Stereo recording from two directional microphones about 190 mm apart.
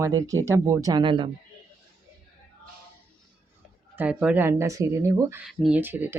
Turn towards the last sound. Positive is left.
turn(degrees=-10)  # may be behind; listen again after turning